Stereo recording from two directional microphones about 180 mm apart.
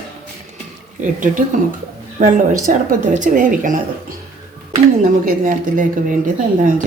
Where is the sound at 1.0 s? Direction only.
45° right (ahead or behind).